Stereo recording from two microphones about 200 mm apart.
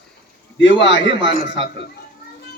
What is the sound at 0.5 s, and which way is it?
Speech, 65° left (ahead or behind).